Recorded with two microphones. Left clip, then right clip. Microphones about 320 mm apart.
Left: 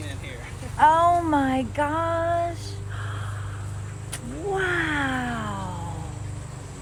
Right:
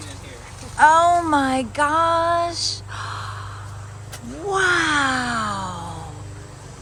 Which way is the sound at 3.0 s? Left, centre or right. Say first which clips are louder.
Right 7 dB; centre.